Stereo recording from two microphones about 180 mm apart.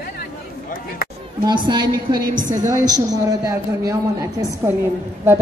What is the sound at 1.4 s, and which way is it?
A man's voice, 25° right (ahead or behind).